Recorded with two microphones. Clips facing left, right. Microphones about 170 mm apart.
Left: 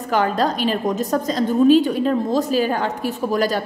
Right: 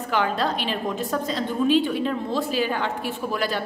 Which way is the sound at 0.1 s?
40° left (ahead or behind).